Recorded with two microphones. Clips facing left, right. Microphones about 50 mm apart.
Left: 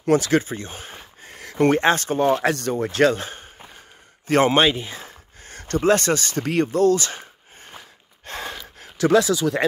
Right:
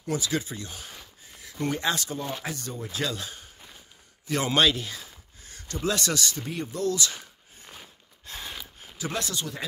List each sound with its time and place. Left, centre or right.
0.0 s speech: left
0.4 s speech: left
1.2 s speech: left
2.4 s speech: left
3.2 s a sound: left
4.3 s speech: left
4.6 s speech: left
5.0 s a sound: left
6.4 s speech: left
6.7 s a sound: left
8.3 s a sound: left
8.7 s speech: left